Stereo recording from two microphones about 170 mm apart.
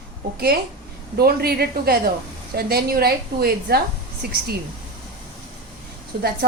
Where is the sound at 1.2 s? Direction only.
65° right (ahead or behind).